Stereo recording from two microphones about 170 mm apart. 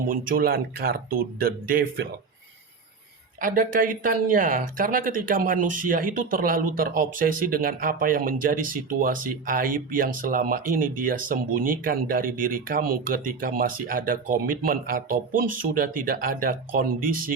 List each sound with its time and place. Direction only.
0.1 s speech: 60° right (ahead or behind)
3.4 s speech: 55° right (ahead or behind)